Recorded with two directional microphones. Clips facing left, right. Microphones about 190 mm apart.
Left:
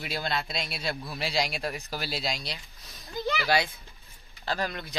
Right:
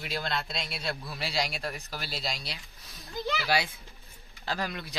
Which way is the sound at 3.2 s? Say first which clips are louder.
Left 3 dB; centre (ahead or behind).